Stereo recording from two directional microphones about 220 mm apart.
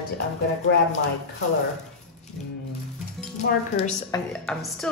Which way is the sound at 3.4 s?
50° left (ahead or behind).